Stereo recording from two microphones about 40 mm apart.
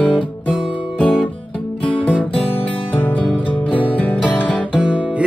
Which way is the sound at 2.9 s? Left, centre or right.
Left.